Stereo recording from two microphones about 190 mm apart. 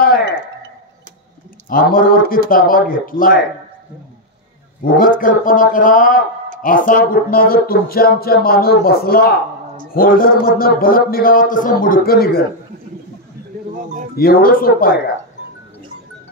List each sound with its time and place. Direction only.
1.7 s speech: 50° left (ahead or behind)
4.9 s speech: 45° left (ahead or behind)
14.1 s speech: 50° left (ahead or behind)